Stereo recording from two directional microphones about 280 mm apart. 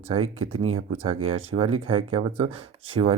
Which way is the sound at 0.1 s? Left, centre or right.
Centre.